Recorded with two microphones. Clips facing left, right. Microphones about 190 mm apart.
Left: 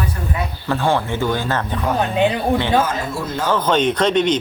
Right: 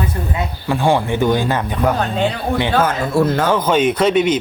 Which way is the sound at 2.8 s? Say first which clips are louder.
Right 7 dB; 65° right (ahead or behind).